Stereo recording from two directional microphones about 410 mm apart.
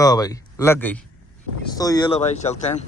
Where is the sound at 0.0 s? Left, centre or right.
Centre.